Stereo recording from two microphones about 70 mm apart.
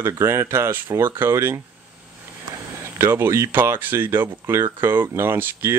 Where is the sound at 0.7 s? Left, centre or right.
Right.